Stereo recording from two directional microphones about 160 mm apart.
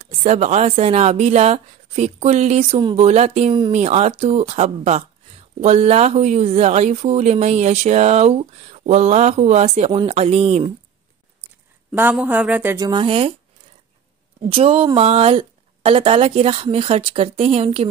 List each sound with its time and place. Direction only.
0.0 s a woman's voice: 45° right (ahead or behind)
11.9 s speech: 10° right (ahead or behind)
12.7 s a woman's voice: 25° right (ahead or behind)
14.5 s a woman's voice: 35° right (ahead or behind)